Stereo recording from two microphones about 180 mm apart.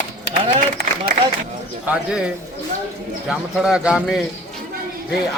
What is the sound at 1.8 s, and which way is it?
Speech, 5° right (ahead or behind).